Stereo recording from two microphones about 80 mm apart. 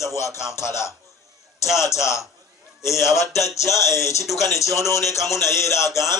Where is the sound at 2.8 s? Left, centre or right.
Left.